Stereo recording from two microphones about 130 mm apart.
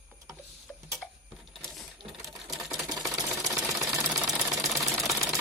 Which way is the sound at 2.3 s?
Centre (ahead or behind).